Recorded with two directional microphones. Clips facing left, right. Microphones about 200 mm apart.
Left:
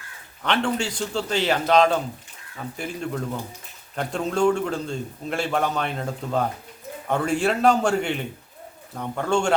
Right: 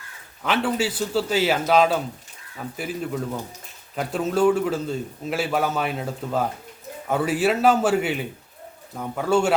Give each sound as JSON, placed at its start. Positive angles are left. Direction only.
{"t": 0.4, "sound": "a man's voice", "side_deg": -5}